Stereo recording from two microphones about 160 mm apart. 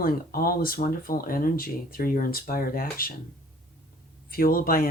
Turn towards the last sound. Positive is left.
turn(degrees=65)  # may be behind; listen again after turning